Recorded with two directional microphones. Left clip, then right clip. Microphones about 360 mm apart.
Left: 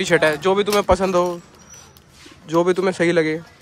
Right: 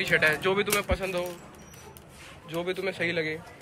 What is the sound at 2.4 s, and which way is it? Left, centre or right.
Speech, left.